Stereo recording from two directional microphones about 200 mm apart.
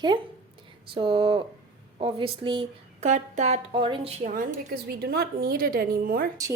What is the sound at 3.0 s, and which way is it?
A woman's voice, 35° right (ahead or behind).